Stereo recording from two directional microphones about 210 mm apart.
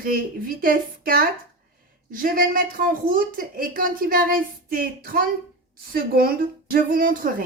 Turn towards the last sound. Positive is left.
turn(degrees=-40)  # may be behind; listen again after turning